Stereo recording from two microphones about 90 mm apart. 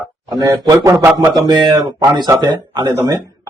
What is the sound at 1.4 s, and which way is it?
Speech, 50° right (ahead or behind).